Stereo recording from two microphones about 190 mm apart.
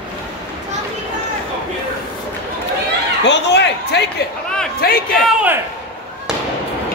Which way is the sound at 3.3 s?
65° left (ahead or behind).